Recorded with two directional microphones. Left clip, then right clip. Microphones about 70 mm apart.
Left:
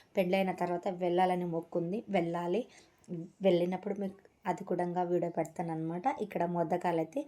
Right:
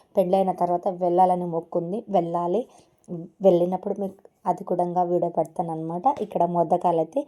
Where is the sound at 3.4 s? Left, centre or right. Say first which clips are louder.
Right 10 dB; right.